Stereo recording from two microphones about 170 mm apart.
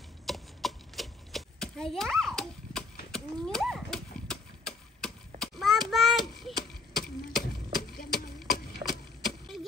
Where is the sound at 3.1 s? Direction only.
5° left (ahead or behind).